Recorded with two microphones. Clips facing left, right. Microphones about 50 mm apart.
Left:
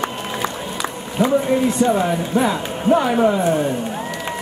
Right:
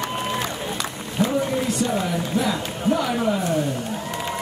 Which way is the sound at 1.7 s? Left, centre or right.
Left.